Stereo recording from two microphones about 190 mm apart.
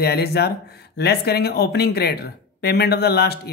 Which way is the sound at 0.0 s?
55° left (ahead or behind).